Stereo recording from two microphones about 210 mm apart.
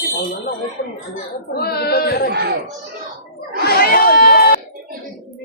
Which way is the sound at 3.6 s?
45° left (ahead or behind).